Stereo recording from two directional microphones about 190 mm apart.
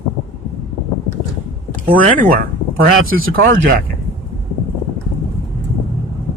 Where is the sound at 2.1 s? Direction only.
45° right (ahead or behind).